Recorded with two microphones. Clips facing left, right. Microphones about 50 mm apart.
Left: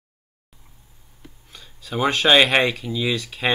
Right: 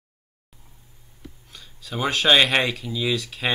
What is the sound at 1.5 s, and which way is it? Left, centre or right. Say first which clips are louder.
Speech: left 4 dB; centre.